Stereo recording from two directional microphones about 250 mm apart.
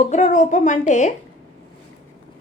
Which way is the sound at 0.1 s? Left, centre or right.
Left.